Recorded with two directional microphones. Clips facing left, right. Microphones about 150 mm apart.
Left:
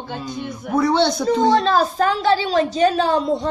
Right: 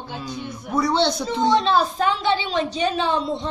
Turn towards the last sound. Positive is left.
turn(degrees=45)  # may be behind; listen again after turning